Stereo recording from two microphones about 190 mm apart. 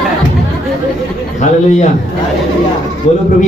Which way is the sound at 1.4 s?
40° left (ahead or behind).